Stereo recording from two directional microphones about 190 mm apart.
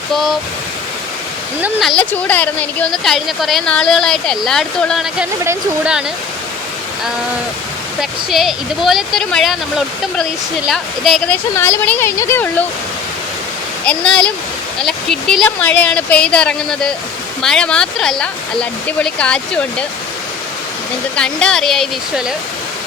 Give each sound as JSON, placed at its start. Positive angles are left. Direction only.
{"t": 0.1, "sound": "a woman's voice", "side_deg": 0}
{"t": 1.6, "sound": "a woman's voice", "side_deg": 0}
{"t": 8.3, "sound": "a woman's voice", "side_deg": 0}
{"t": 11.5, "sound": "speech", "side_deg": 15}
{"t": 13.8, "sound": "a woman's voice", "side_deg": 5}
{"t": 21.2, "sound": "a woman's voice", "side_deg": 5}